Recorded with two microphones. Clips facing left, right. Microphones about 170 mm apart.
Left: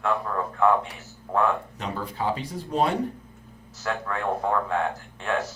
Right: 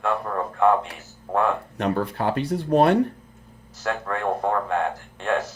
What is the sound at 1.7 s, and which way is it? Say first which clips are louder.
Speech: right 7 dB; 65° right (ahead or behind).